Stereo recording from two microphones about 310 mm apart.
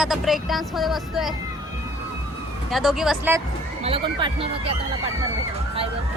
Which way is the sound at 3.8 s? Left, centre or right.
Centre.